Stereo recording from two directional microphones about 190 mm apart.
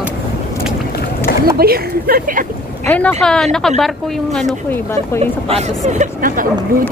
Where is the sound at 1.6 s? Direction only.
50° right (ahead or behind).